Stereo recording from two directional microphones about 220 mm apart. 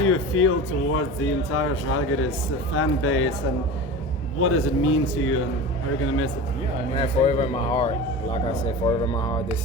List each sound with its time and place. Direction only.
0.0 s speech: 70° left (ahead or behind)
4.4 s speech: 70° left (ahead or behind)
6.9 s speech: 25° left (ahead or behind)